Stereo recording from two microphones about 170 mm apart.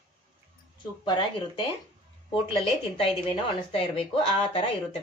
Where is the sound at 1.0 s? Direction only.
30° left (ahead or behind).